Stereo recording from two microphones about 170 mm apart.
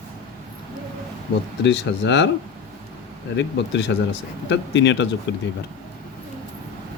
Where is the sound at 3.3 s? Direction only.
90° left.